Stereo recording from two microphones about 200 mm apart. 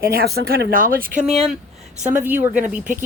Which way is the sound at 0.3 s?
50° right (ahead or behind).